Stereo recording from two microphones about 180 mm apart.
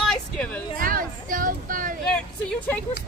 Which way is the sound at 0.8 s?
50° right (ahead or behind).